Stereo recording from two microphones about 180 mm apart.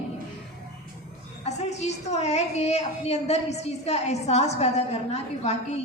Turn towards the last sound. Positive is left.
turn(degrees=35)  # may be behind; listen again after turning